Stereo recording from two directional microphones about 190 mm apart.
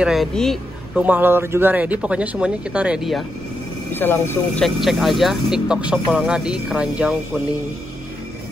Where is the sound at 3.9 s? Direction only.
10° left (ahead or behind).